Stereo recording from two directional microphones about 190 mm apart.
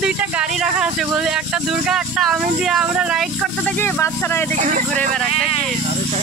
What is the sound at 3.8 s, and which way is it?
Speech, 10° left (ahead or behind).